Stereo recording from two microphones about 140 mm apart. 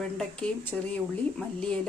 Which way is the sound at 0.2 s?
10° left (ahead or behind).